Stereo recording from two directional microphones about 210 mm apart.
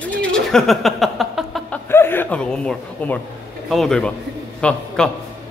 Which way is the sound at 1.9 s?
10° left (ahead or behind).